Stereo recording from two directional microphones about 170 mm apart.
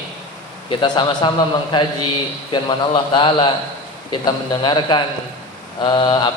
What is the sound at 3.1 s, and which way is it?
A man's voice, 30° left (ahead or behind).